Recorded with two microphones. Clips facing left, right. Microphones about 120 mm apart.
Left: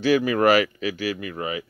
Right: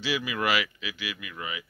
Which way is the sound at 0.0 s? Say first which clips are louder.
Left 11 dB; 45° left (ahead or behind).